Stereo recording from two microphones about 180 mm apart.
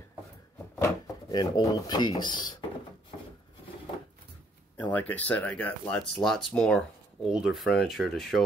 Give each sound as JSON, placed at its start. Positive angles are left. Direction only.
{"t": 0.7, "sound": "speech", "side_deg": 15}
{"t": 3.1, "sound": "wood", "side_deg": 40}
{"t": 4.9, "sound": "speech", "side_deg": 10}